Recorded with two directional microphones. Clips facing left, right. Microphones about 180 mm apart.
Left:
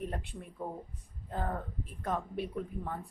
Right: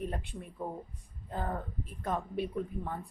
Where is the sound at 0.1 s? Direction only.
Centre (ahead or behind).